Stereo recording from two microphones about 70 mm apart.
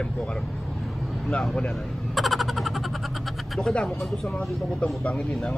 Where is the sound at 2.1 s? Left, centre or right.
Centre.